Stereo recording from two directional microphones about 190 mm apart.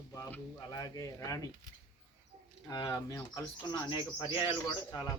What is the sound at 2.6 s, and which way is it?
Speech, 20° left (ahead or behind).